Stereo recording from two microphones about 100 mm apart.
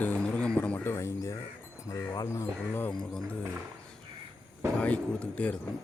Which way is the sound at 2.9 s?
5° left (ahead or behind).